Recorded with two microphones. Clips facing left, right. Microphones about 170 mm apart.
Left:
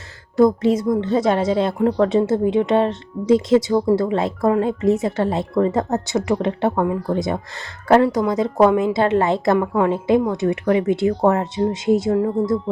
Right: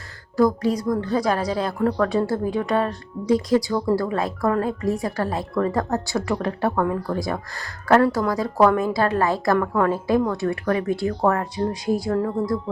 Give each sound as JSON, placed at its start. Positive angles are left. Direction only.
{"t": 0.3, "sound": "a woman's voice", "side_deg": 25}
{"t": 8.0, "sound": "a woman's voice", "side_deg": 10}
{"t": 8.3, "sound": "a woman's voice", "side_deg": 20}